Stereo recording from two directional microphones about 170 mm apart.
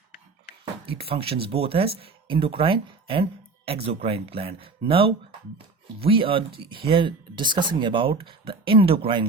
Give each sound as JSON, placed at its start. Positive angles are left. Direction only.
{"t": 0.9, "sound": "speech", "side_deg": -35}